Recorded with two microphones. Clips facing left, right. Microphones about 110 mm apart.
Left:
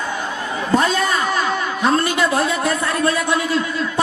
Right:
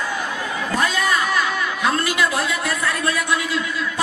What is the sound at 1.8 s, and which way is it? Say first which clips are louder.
A man's voice: left 3 dB; 30° left (ahead or behind).